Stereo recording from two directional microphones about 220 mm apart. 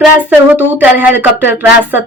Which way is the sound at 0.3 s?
10° right (ahead or behind).